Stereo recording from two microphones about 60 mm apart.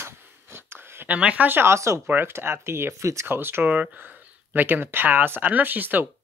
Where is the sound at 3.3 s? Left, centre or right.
Right.